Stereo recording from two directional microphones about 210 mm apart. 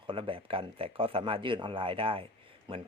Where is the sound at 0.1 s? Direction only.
25° right (ahead or behind).